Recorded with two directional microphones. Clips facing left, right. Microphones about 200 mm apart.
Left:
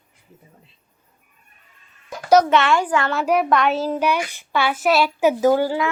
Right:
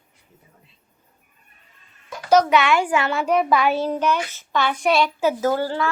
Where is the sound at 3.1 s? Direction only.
5° left (ahead or behind).